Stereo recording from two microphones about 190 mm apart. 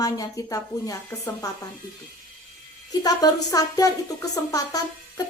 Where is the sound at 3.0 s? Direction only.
20° left (ahead or behind).